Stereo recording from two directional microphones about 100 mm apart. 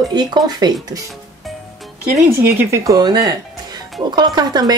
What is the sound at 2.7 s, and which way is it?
Speech, 35° right (ahead or behind).